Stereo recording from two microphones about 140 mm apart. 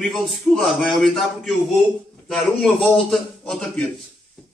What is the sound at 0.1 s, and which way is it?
A man's voice, centre (ahead or behind).